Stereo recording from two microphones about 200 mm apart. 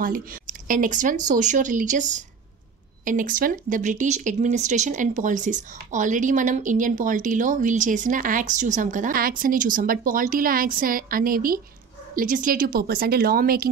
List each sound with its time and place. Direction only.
0.0 s speech: 45° right (ahead or behind)